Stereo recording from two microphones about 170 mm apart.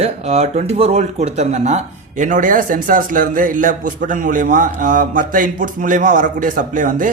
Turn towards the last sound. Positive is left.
turn(degrees=-50)  # may be behind; listen again after turning